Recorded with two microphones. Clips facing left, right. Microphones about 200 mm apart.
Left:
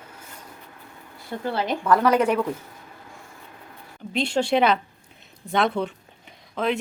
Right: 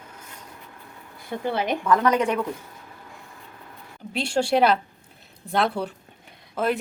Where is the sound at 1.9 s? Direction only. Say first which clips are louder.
Left 2 dB; 10° left (ahead or behind).